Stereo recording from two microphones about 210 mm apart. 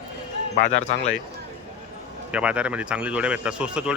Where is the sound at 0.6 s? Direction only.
35° left (ahead or behind).